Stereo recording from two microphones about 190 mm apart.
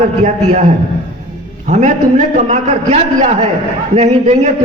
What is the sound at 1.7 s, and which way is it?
A man's voice, 40° right (ahead or behind).